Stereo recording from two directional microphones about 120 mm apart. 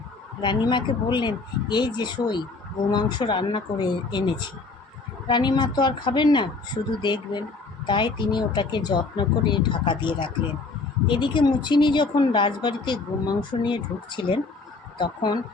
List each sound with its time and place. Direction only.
0.4 s speech: 40° left (ahead or behind)